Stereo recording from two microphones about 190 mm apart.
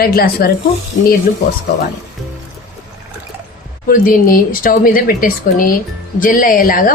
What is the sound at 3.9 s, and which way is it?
Speech, 45° left (ahead or behind).